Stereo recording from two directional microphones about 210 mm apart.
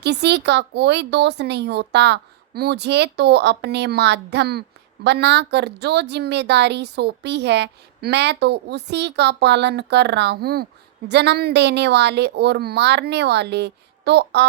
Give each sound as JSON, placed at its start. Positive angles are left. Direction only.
{"t": 0.0, "sound": "a woman's voice", "side_deg": -55}